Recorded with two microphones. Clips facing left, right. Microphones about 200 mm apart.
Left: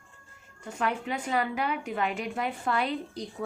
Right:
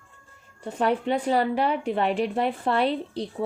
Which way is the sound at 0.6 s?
35° right (ahead or behind).